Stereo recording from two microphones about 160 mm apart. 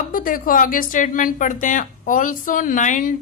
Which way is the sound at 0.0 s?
60° left (ahead or behind).